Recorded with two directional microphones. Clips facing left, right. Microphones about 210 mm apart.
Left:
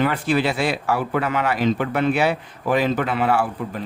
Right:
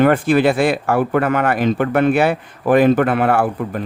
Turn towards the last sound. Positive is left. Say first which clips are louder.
# right 4 dB
turn(degrees=-55)  # may be behind; listen again after turning